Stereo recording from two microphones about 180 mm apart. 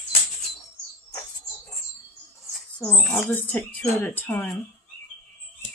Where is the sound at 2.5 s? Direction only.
5° left (ahead or behind).